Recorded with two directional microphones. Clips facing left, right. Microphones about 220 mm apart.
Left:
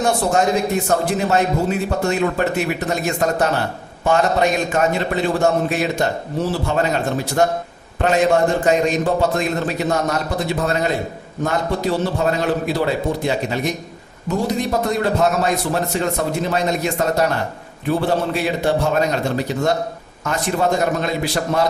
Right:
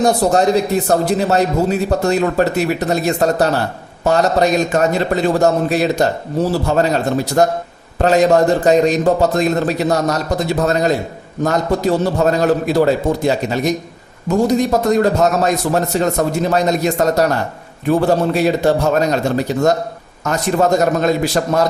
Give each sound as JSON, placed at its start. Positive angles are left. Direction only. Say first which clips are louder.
{"t": 0.0, "sound": "a man's voice", "louder": "right 4 dB", "side_deg": -40}
{"t": 20.2, "sound": "a man's voice", "louder": "right 4 dB", "side_deg": -40}